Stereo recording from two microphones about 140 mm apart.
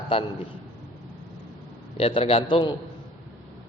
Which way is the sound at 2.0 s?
45° left (ahead or behind).